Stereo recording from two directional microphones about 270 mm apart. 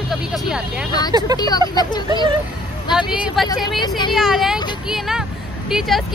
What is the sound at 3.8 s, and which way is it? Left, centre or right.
Speech, centre.